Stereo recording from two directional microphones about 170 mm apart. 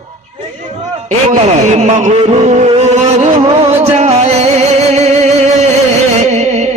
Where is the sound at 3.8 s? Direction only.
40° right (ahead or behind).